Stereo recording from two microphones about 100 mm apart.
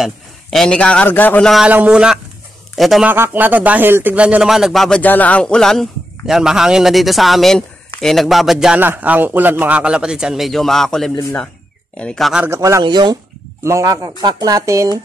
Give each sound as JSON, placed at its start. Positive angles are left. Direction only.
{"t": 0.0, "sound": "a man's voice", "side_deg": 5}
{"t": 1.6, "sound": "a man's voice", "side_deg": -15}
{"t": 3.1, "sound": "a man's voice", "side_deg": -20}
{"t": 5.0, "sound": "a man's voice", "side_deg": 15}
{"t": 8.7, "sound": "a man's voice", "side_deg": -20}
{"t": 12.4, "sound": "speech", "side_deg": -30}
{"t": 12.8, "sound": "speech", "side_deg": -45}
{"t": 13.7, "sound": "speech", "side_deg": -30}